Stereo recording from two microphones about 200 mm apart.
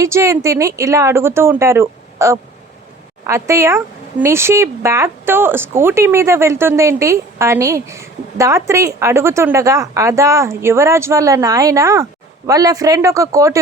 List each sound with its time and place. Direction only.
0.0 s speech: 15° right (ahead or behind)